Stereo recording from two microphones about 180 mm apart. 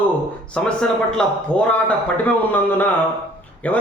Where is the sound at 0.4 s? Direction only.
5° left (ahead or behind).